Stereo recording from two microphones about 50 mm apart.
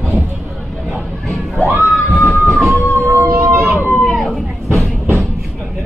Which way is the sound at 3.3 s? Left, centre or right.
Right.